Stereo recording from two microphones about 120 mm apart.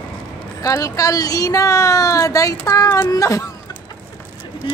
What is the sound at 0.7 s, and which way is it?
A woman's voice, 30° left (ahead or behind).